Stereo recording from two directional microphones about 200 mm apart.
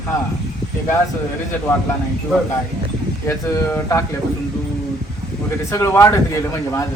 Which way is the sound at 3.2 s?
15° left (ahead or behind).